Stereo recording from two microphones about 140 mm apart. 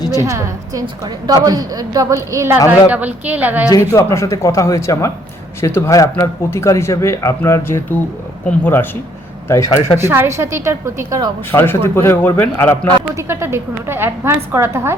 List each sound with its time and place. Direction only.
0.2 s a woman's voice: 20° right (ahead or behind)
3.7 s a man's voice: 20° left (ahead or behind)
10.0 s a woman's voice: 15° right (ahead or behind)
11.5 s a man's voice: 15° left (ahead or behind)
13.1 s a woman's voice: 15° right (ahead or behind)